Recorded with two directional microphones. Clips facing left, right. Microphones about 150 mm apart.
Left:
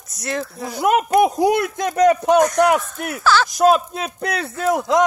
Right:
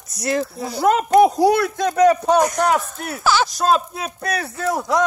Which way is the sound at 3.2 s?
15° right (ahead or behind).